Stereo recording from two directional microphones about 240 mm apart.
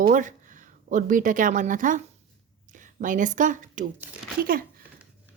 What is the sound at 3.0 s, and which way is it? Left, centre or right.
A woman's voice, right.